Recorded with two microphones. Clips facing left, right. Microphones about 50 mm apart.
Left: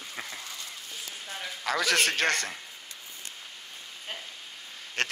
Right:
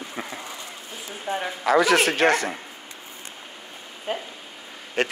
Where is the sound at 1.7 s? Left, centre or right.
Centre.